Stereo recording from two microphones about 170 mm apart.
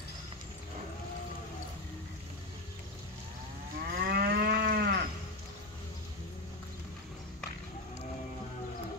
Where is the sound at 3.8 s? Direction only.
65° right (ahead or behind).